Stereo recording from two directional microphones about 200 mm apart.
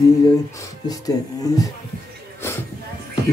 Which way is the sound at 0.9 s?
20° left (ahead or behind).